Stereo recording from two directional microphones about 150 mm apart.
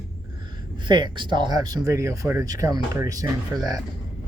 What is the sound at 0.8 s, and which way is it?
Speech, 30° right (ahead or behind).